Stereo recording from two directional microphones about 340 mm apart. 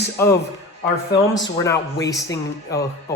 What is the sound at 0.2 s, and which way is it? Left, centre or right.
Speech, centre.